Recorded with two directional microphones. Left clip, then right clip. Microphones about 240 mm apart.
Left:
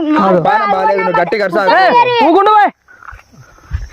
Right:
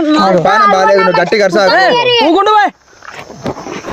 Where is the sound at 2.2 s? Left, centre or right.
Left.